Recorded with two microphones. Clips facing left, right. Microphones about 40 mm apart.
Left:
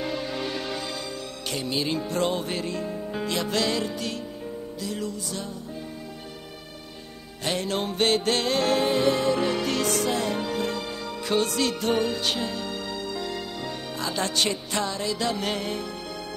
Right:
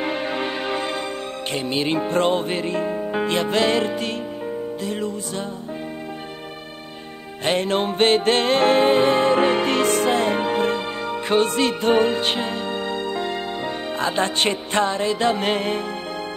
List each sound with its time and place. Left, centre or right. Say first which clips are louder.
0.0 s music: right 5 dB; right
7.4 s music: right 7 dB; right